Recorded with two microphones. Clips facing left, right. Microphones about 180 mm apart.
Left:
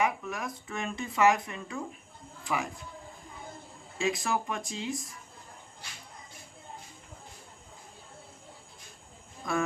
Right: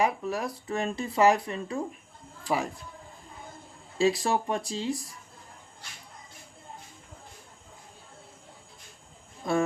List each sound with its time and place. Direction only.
0.0 s speech: 30° right (ahead or behind)
3.9 s speech: 30° right (ahead or behind)
9.4 s speech: 30° right (ahead or behind)